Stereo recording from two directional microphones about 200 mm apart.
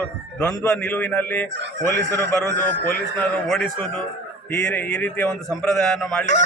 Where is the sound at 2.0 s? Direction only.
60° right (ahead or behind).